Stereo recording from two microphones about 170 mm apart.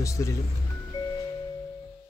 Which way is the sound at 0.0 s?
20° left (ahead or behind).